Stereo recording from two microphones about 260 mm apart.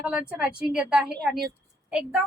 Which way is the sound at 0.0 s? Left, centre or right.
Centre.